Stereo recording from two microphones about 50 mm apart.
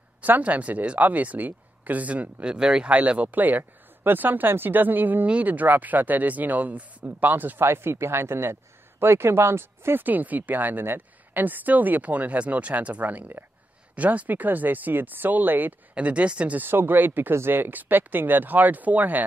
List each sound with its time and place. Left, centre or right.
0.4 s speech: right
2.4 s speech: centre
2.9 s speech: right
7.6 s speech: right
10.0 s speech: right
15.9 s speech: right
16.6 s speech: right